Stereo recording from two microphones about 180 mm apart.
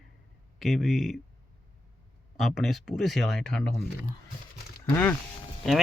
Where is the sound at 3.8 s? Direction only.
60° left (ahead or behind).